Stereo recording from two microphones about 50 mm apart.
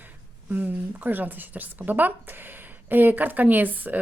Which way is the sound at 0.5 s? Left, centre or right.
Right.